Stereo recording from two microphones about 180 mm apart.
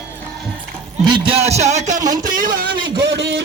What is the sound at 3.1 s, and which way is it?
Speech, 70° right (ahead or behind).